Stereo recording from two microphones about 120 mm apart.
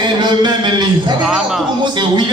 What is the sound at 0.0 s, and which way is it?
Speech, 40° right (ahead or behind).